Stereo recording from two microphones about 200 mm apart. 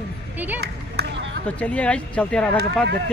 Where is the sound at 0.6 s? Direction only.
60° right (ahead or behind).